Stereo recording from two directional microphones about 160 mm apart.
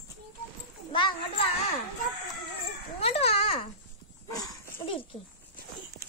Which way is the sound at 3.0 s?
40° left (ahead or behind).